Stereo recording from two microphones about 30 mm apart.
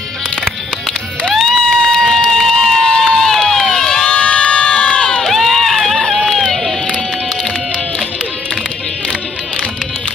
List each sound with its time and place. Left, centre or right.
1.3 s music: centre
2.0 s run: centre
3.7 s crowd: centre
4.1 s crowd: left
5.2 s run: centre